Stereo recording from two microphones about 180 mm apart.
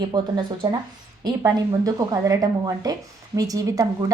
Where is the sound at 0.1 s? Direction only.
25° right (ahead or behind).